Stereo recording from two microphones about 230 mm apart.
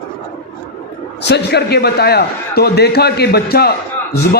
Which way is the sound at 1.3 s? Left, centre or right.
Left.